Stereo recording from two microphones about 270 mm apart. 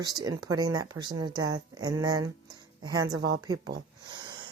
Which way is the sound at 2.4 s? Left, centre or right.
Centre.